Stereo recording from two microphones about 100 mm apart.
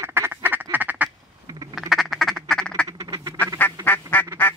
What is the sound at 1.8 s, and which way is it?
Duck, centre (ahead or behind).